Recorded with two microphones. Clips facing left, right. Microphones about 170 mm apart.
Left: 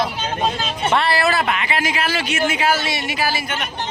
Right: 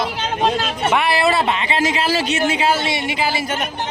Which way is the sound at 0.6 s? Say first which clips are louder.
Right 2 dB; 70° right (ahead or behind).